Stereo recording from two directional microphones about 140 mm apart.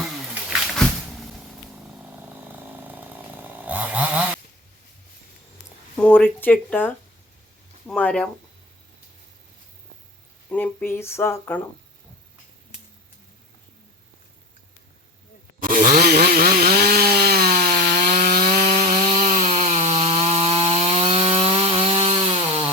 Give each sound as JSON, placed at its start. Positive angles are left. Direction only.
{"t": 0.5, "sound": "a sound", "side_deg": 0}
{"t": 2.0, "sound": "chainsaw", "side_deg": -10}
{"t": 6.0, "sound": "speech", "side_deg": 10}
{"t": 10.5, "sound": "speech", "side_deg": 10}
{"t": 15.6, "sound": "chainsaw", "side_deg": -85}